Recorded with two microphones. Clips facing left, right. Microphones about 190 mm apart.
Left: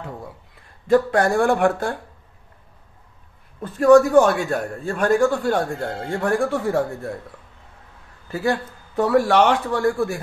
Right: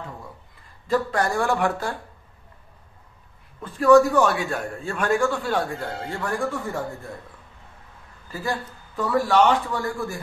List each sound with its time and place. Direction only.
0.8 s speech: 55° left (ahead or behind)
3.6 s a man's voice: 45° left (ahead or behind)
5.8 s speech: 55° left (ahead or behind); by 7.1 s 70° left (ahead or behind)
8.3 s speech: 65° left (ahead or behind)